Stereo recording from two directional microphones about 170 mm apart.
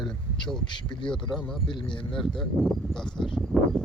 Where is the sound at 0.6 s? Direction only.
25° left (ahead or behind).